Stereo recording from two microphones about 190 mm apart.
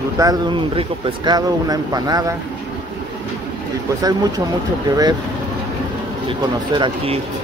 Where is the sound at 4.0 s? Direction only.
20° right (ahead or behind).